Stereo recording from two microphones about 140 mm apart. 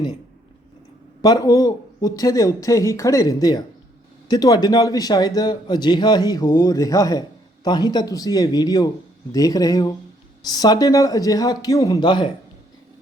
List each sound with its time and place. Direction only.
1.2 s a man's voice: 25° left (ahead or behind)